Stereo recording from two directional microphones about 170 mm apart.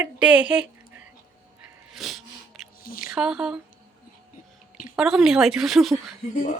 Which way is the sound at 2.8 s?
55° left (ahead or behind).